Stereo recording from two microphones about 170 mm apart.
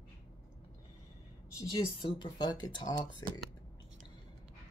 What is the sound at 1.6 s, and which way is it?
Speech, 25° left (ahead or behind).